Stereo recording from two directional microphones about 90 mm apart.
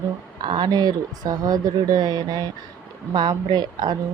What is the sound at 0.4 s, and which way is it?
Speech, 55° right (ahead or behind).